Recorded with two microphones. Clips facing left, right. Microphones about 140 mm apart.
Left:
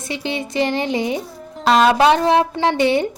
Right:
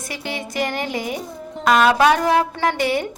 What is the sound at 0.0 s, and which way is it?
A woman's voice, 25° left (ahead or behind).